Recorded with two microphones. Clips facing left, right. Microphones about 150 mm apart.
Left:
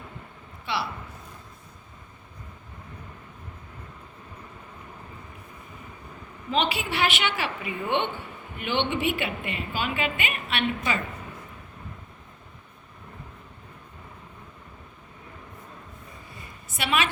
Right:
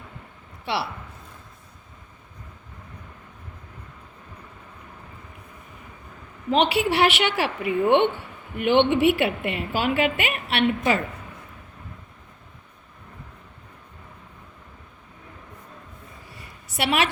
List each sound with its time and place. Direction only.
0.6 s speech: 70° right (ahead or behind)
6.5 s a woman's voice: 65° right (ahead or behind)
16.6 s a woman's voice: 65° right (ahead or behind)